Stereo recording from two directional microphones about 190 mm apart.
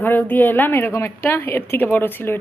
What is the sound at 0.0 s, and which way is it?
A woman's voice, 10° left (ahead or behind).